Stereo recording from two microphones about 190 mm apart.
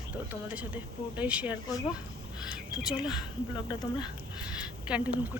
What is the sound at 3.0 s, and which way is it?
Speech, 25° left (ahead or behind).